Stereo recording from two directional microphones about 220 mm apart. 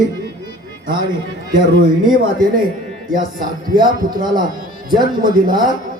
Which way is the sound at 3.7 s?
40° right (ahead or behind).